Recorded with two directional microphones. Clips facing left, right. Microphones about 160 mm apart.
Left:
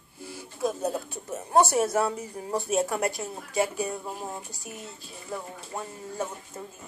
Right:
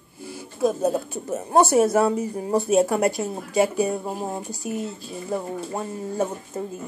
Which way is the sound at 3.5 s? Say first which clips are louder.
Right 7 dB; 85° right.